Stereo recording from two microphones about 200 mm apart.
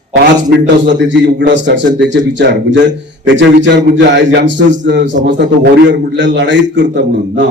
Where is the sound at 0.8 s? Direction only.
65° right (ahead or behind).